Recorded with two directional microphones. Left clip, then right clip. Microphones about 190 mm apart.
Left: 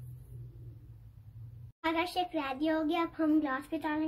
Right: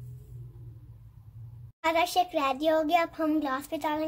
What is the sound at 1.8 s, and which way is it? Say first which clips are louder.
Child singing: right 7 dB; 45° right (ahead or behind).